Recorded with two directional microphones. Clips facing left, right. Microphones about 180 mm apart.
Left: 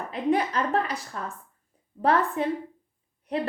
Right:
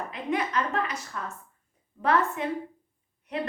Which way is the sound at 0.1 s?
35° left (ahead or behind).